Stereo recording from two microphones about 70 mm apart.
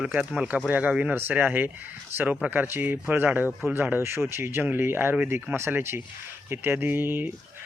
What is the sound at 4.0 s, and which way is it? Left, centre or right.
Speech, right.